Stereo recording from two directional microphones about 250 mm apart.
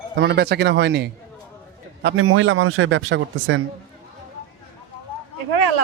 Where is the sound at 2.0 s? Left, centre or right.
Right.